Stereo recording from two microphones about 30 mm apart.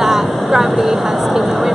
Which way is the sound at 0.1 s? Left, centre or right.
Centre.